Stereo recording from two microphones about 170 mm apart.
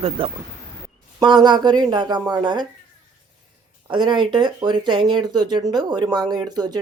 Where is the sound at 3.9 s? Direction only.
25° right (ahead or behind).